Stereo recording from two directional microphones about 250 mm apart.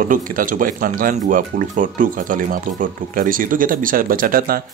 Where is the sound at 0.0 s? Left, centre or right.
Right.